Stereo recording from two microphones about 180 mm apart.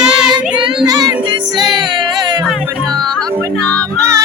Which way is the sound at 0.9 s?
20° right (ahead or behind).